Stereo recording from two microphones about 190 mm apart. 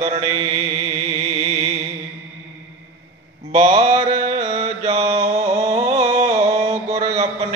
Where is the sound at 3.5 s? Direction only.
35° right (ahead or behind).